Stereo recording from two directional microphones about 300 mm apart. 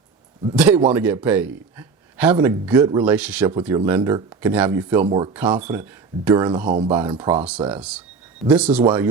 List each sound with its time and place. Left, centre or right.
0.5 s speech: centre
6.7 s speech: centre